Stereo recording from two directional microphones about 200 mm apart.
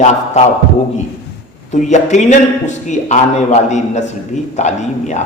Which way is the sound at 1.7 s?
35° left (ahead or behind).